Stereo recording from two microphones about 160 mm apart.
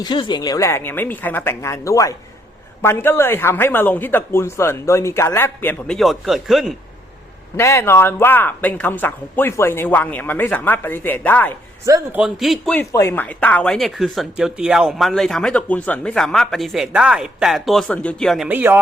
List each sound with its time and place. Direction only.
0.0 s a man's voice: 30° left (ahead or behind); by 6.0 s 15° left (ahead or behind)
6.0 s speech: centre (ahead or behind)
7.5 s a man's voice: 15° left (ahead or behind)
12.1 s speech: 5° right (ahead or behind)
12.7 s speech: 20° left (ahead or behind)
18.4 s speech: 10° right (ahead or behind)